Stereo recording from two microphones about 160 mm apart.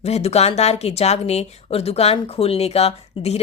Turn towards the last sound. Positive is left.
turn(degrees=40)  # may be behind; listen again after turning